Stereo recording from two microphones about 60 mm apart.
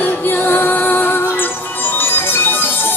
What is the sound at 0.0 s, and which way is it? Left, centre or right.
Music, left.